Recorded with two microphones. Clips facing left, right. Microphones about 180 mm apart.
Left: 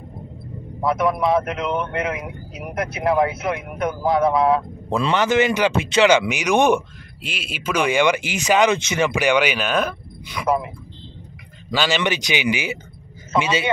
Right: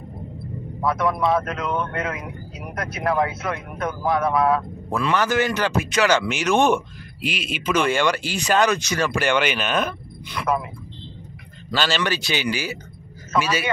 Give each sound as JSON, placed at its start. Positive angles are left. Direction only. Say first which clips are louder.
{"t": 0.7, "sound": "a man's voice", "louder": "left 2 dB", "side_deg": 20}
{"t": 7.2, "sound": "a man's voice", "louder": "right 3 dB", "side_deg": 5}
{"t": 9.1, "sound": "speech", "louder": "left 2 dB", "side_deg": 10}
{"t": 11.7, "sound": "a man's voice", "louder": "left 2 dB", "side_deg": 15}